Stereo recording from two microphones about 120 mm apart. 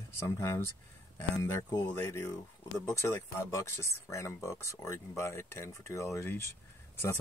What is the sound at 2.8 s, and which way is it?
Speech, 20° left (ahead or behind).